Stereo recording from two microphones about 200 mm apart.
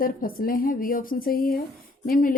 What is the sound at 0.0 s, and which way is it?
A woman's voice, 45° left (ahead or behind).